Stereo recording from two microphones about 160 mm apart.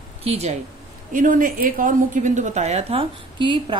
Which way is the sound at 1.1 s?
55° right (ahead or behind).